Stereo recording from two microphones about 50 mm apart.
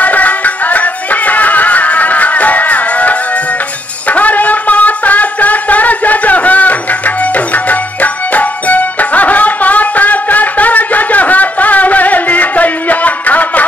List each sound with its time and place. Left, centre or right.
0.0 s music: left